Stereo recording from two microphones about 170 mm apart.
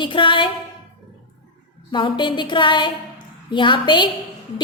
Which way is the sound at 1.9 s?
30° left (ahead or behind).